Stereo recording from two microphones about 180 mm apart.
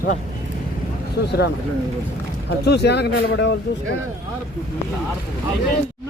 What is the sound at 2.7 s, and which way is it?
Speech, 70° left (ahead or behind).